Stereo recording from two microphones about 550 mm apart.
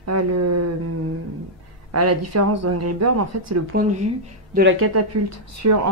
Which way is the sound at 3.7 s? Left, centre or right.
Centre.